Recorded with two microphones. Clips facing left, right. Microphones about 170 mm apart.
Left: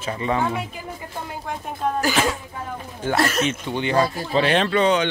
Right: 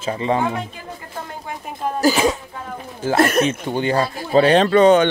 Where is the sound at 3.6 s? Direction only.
40° right (ahead or behind).